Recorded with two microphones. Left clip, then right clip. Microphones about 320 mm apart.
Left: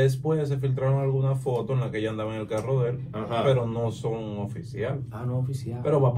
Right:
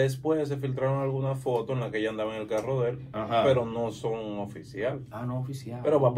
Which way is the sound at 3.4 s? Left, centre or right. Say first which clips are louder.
Even; right.